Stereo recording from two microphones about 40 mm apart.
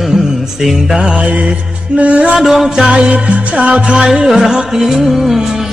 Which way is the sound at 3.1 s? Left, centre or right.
Right.